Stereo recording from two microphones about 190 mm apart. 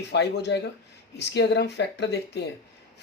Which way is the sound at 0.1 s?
60° left (ahead or behind).